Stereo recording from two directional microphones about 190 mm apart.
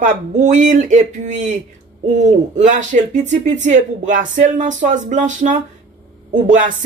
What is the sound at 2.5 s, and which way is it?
Speech, 40° right (ahead or behind).